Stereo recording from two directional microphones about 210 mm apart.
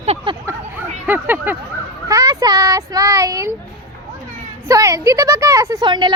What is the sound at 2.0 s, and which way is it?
Speech, 15° right (ahead or behind).